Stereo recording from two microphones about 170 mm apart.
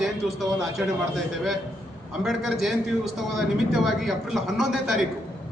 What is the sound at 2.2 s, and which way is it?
A man's voice, centre (ahead or behind).